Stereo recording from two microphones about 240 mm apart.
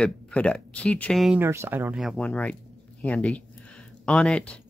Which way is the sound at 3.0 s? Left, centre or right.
Centre.